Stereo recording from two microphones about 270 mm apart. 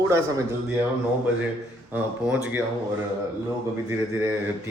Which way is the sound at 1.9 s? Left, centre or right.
Centre.